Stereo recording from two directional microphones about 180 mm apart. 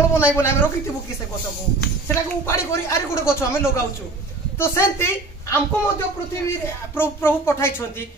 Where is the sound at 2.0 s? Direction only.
15° left (ahead or behind).